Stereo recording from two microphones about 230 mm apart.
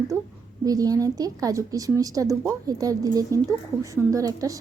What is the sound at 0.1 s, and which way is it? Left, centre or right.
A woman's voice, centre.